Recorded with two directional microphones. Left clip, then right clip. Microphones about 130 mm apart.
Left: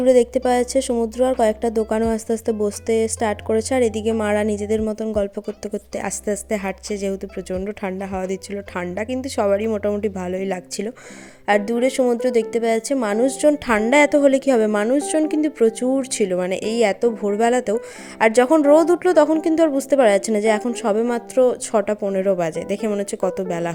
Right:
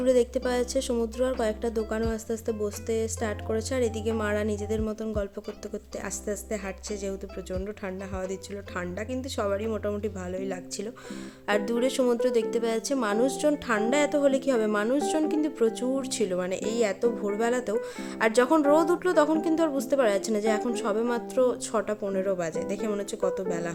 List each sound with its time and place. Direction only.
0.0 s a woman's voice: 40° left (ahead or behind)
11.4 s a woman's voice: 35° left (ahead or behind); by 23.7 s 55° left (ahead or behind)